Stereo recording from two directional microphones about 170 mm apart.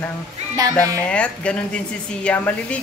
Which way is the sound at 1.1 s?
5° left (ahead or behind).